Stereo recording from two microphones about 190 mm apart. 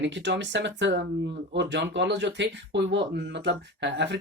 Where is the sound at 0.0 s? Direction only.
70° right (ahead or behind).